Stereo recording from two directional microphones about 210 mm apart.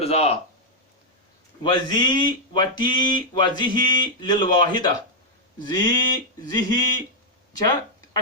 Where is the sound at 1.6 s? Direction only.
20° left (ahead or behind).